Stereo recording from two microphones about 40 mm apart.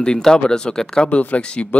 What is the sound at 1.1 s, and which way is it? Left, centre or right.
Speech, left.